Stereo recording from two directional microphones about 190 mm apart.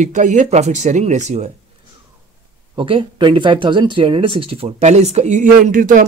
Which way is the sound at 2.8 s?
25° right (ahead or behind).